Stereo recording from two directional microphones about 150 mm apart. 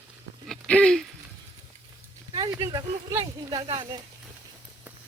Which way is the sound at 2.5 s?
25° right (ahead or behind).